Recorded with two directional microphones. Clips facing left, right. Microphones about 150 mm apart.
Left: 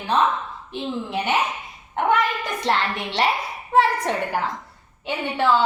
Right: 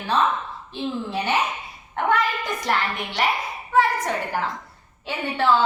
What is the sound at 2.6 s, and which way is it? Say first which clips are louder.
Child singing: left 3 dB; 25° left (ahead or behind).